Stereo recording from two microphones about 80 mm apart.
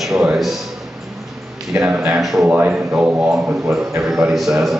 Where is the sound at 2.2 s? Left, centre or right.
Centre.